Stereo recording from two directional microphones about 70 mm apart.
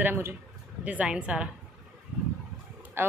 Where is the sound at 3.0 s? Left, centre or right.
Right.